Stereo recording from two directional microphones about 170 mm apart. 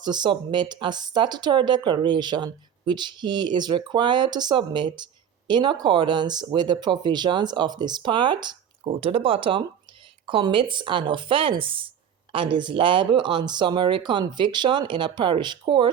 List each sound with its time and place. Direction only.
0.0 s speech: 25° right (ahead or behind)